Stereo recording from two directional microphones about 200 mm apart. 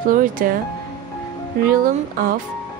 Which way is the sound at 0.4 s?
45° right (ahead or behind).